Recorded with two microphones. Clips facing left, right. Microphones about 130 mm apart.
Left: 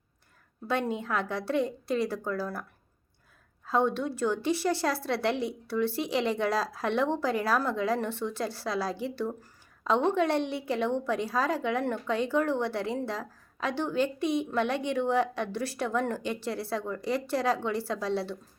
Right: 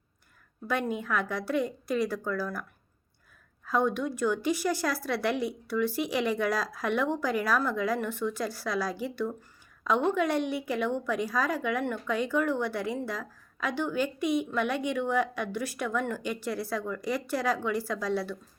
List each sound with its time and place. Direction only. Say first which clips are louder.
0.7 s a woman's voice: even; 30° left (ahead or behind)
3.7 s a woman's voice: even; 30° left (ahead or behind)